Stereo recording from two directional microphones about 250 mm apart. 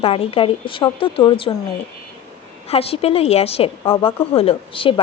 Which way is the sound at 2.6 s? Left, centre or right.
Left.